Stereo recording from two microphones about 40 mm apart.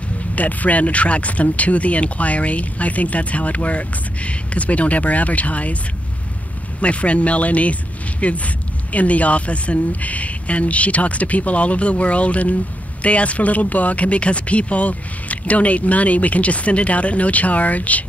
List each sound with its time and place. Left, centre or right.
0.4 s speech: left
6.8 s speech: left